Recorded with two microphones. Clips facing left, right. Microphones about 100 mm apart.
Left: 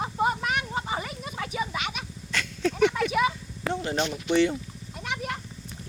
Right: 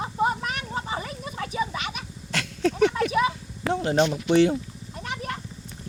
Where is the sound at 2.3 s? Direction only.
80° right.